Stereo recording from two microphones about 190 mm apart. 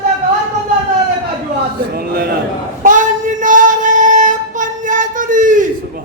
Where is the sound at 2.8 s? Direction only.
40° right (ahead or behind).